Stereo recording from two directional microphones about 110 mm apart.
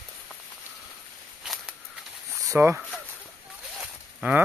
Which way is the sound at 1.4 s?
5° right (ahead or behind).